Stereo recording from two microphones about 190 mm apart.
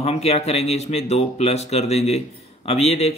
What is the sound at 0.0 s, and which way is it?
Speech, 35° left (ahead or behind).